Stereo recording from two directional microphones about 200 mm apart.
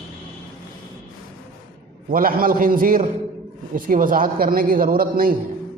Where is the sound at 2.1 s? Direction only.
45° right (ahead or behind).